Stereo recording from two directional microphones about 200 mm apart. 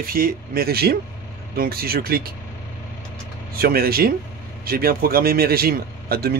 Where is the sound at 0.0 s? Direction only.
45° right (ahead or behind).